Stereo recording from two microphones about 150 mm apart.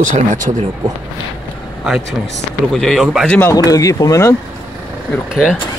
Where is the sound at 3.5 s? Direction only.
25° left (ahead or behind).